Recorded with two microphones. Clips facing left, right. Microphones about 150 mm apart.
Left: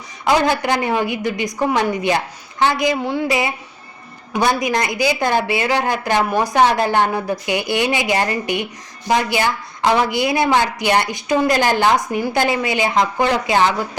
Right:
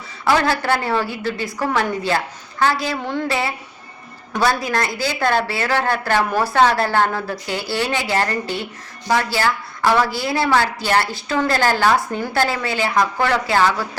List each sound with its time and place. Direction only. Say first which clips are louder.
0.3 s a woman's voice: left 1 dB; 15° left (ahead or behind)